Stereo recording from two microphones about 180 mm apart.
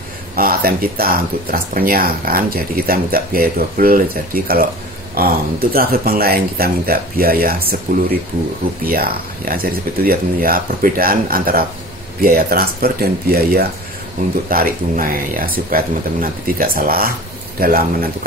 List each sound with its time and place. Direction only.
0.4 s speech: 55° right (ahead or behind)